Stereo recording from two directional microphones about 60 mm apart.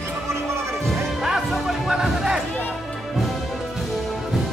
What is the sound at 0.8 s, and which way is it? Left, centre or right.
Music, centre.